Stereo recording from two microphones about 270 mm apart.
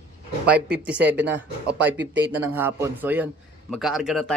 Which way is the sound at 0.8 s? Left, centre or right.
Centre.